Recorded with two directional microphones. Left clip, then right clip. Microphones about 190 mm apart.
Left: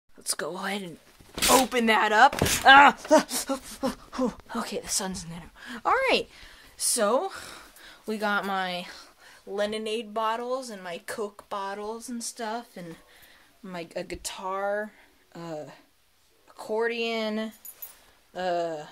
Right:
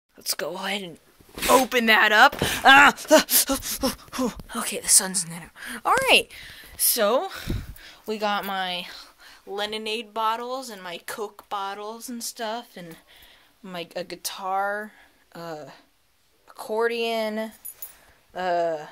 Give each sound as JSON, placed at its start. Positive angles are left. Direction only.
{"t": 0.2, "sound": "speech", "side_deg": 0}
{"t": 2.6, "sound": "a sound", "side_deg": -25}
{"t": 3.1, "sound": "speech", "side_deg": -5}
{"t": 3.3, "sound": "a sound", "side_deg": -20}
{"t": 3.8, "sound": "speech", "side_deg": -5}
{"t": 4.9, "sound": "speech", "side_deg": -15}
{"t": 5.9, "sound": "speech", "side_deg": 0}
{"t": 8.8, "sound": "speech", "side_deg": -5}